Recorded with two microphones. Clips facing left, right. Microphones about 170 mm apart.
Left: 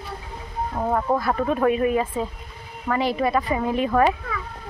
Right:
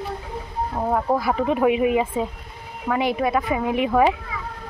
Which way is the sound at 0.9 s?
10° right (ahead or behind).